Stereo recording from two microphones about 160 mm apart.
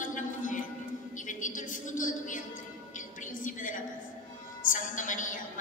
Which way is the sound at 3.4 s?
55° left (ahead or behind).